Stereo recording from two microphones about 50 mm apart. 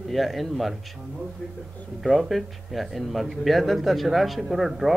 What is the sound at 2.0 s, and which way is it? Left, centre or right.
Speech, centre.